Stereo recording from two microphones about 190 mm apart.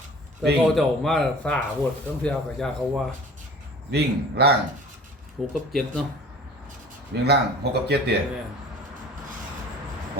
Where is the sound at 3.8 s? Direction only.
60° right (ahead or behind).